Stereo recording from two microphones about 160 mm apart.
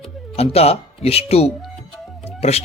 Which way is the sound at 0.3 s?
40° left (ahead or behind).